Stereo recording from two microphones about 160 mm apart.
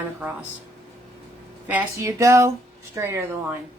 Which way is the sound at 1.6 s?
15° right (ahead or behind).